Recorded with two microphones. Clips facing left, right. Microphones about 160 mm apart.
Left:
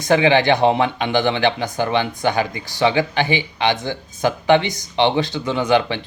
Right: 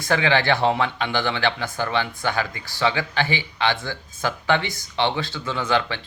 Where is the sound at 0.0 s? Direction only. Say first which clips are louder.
Left 6 dB; 20° left (ahead or behind).